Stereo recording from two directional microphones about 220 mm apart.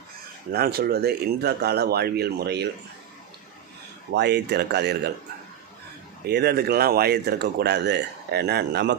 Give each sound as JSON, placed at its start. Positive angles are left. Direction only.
{"t": 0.5, "sound": "speech", "side_deg": -45}
{"t": 4.1, "sound": "speech", "side_deg": -50}
{"t": 6.2, "sound": "speech", "side_deg": -45}